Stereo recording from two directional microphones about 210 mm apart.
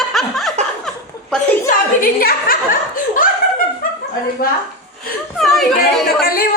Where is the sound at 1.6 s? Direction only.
40° left (ahead or behind).